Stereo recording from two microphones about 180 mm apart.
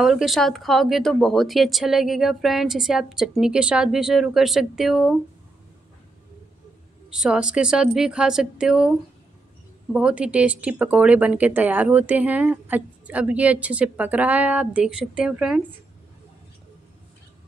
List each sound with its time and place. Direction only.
0.0 s speech: centre (ahead or behind)
7.1 s speech: 5° right (ahead or behind)
9.9 s speech: 5° right (ahead or behind)